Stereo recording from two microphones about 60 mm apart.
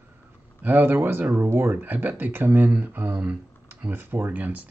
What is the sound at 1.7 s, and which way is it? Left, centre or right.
Speech, right.